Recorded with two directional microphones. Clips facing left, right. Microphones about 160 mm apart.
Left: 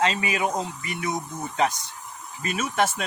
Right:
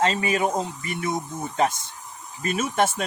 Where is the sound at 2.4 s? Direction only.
35° right (ahead or behind).